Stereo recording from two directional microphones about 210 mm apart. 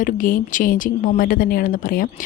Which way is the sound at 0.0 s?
40° left (ahead or behind).